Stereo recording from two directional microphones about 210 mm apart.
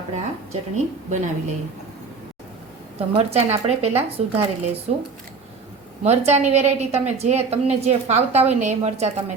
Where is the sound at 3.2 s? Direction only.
30° right (ahead or behind).